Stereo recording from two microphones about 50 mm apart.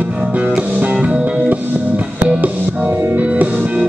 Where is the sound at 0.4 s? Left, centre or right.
Right.